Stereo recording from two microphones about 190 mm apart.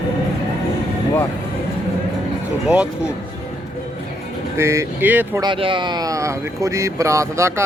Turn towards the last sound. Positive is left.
turn(degrees=-15)  # may be behind; listen again after turning